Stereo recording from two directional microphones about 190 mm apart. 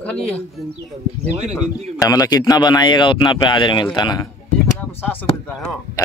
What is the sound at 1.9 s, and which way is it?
Speech, 20° left (ahead or behind).